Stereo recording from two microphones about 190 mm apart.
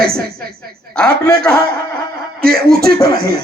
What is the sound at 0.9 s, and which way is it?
Speech, 5° left (ahead or behind).